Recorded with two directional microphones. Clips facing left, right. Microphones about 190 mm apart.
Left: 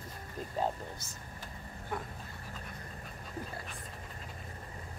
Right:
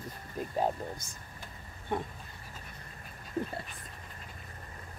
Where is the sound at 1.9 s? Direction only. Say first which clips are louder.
Right 5 dB; 25° right (ahead or behind).